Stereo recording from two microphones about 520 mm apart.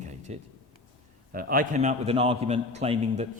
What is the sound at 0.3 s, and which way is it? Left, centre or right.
A man's voice, centre.